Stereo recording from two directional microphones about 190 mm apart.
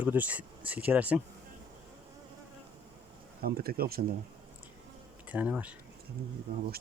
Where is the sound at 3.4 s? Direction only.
55° right (ahead or behind).